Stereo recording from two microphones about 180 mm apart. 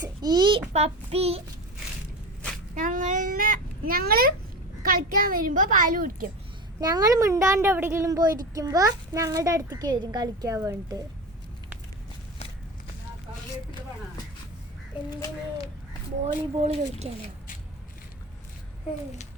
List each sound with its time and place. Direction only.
0.0 s a child's voice: 20° right (ahead or behind)
2.7 s a sound: 45° right (ahead or behind)
4.8 s a child's voice: 50° right (ahead or behind)
6.7 s a woman's voice: 20° right (ahead or behind)
16.2 s speech: 35° right (ahead or behind)